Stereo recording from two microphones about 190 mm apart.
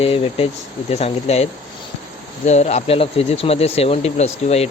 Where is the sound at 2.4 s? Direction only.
35° left (ahead or behind).